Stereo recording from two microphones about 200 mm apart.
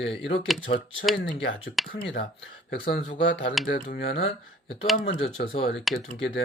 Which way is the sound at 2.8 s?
60° left (ahead or behind).